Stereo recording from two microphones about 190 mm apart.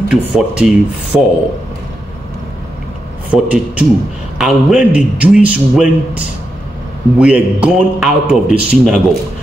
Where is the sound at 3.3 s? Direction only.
5° right (ahead or behind).